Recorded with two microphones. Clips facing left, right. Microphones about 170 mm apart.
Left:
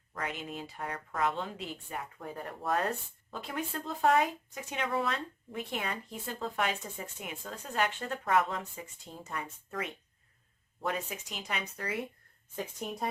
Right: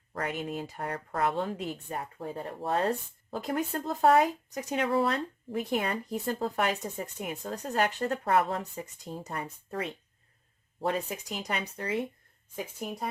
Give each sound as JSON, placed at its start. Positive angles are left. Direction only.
{"t": 0.1, "sound": "speech", "side_deg": -40}
{"t": 12.5, "sound": "speech", "side_deg": 0}